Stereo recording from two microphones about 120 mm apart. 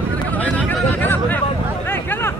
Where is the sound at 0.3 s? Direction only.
10° left (ahead or behind).